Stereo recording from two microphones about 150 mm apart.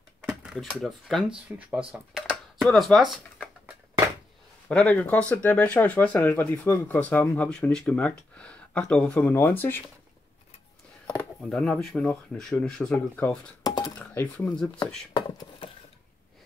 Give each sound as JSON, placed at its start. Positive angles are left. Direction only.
{"t": 0.2, "sound": "speech", "side_deg": -5}
{"t": 4.6, "sound": "speech", "side_deg": 10}
{"t": 11.1, "sound": "speech", "side_deg": 5}
{"t": 13.7, "sound": "a sound", "side_deg": 25}
{"t": 13.9, "sound": "speech", "side_deg": 10}
{"t": 15.1, "sound": "a sound", "side_deg": 30}